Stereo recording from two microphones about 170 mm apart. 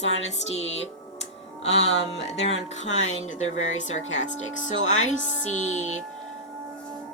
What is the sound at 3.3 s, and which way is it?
Speech, 40° left (ahead or behind).